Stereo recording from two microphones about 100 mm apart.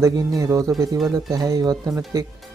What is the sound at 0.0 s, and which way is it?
Speech, 35° right (ahead or behind).